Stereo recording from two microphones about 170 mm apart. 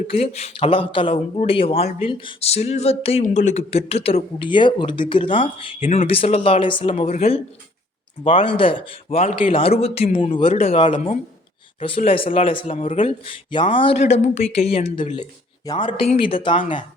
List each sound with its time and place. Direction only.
0.1 s speech: 40° left (ahead or behind)